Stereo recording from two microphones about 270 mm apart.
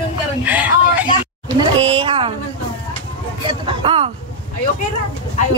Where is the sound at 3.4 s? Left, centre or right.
Centre.